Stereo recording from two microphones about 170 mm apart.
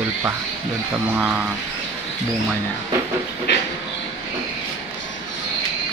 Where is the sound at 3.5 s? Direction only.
90° left.